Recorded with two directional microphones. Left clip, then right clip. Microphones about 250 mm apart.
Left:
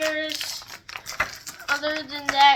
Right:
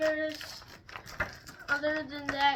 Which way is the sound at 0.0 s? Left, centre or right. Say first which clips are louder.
Left 5 dB; centre.